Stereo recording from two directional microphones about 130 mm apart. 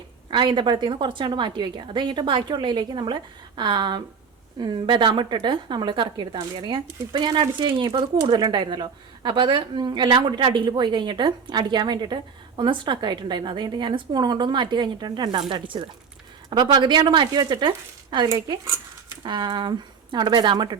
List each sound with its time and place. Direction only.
0.3 s a woman's voice: 40° right (ahead or behind)